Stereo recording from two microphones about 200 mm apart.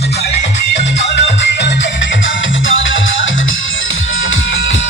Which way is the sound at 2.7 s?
70° left (ahead or behind).